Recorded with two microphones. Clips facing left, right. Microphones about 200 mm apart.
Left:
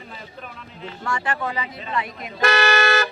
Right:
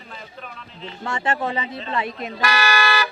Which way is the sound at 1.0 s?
25° right (ahead or behind).